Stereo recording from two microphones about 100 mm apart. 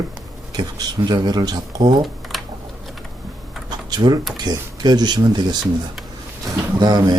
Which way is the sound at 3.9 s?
45° right (ahead or behind).